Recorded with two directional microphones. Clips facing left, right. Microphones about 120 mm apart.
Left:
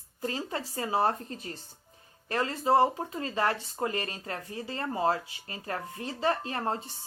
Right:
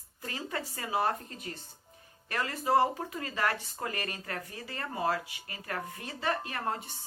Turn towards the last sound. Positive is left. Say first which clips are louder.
# left 3 dB
turn(degrees=30)  # may be behind; listen again after turning